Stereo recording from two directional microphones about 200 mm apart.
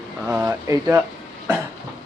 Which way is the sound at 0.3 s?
10° right (ahead or behind).